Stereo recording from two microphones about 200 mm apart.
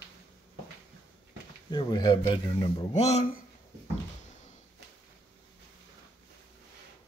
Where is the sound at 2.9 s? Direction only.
35° left (ahead or behind).